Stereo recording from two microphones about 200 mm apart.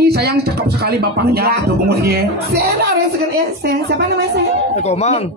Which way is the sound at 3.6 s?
55° right (ahead or behind).